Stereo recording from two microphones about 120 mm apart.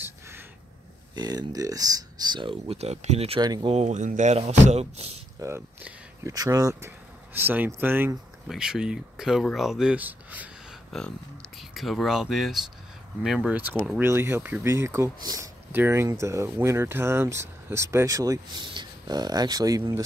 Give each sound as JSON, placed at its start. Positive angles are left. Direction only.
{"t": 0.0, "sound": "a sound", "side_deg": -20}
{"t": 1.1, "sound": "speech", "side_deg": -35}
{"t": 2.4, "sound": "speech", "side_deg": -55}
{"t": 3.3, "sound": "speech", "side_deg": -35}
{"t": 3.6, "sound": "speech", "side_deg": -65}
{"t": 6.2, "sound": "speech", "side_deg": -30}
{"t": 7.3, "sound": "speech", "side_deg": -15}
{"t": 8.5, "sound": "speech", "side_deg": -5}
{"t": 10.9, "sound": "speech", "side_deg": 5}
{"t": 13.5, "sound": "speech", "side_deg": -15}
{"t": 15.7, "sound": "speech", "side_deg": -20}